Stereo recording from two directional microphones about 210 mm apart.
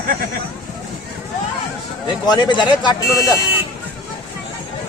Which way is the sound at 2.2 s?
20° left (ahead or behind).